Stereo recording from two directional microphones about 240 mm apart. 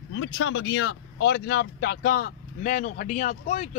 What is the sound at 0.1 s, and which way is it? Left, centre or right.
Speech, left.